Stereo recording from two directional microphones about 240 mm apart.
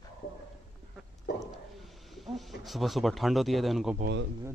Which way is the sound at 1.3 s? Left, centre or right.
Left.